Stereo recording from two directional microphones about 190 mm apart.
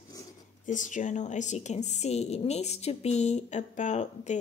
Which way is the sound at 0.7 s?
40° left (ahead or behind).